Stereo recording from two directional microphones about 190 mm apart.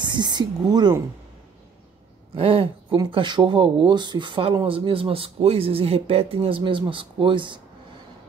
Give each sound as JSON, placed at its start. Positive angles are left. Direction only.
{"t": 0.0, "sound": "speech", "side_deg": -25}
{"t": 2.3, "sound": "speech", "side_deg": -30}